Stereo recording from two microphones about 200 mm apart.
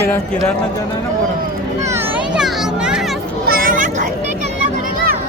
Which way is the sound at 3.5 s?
45° right (ahead or behind).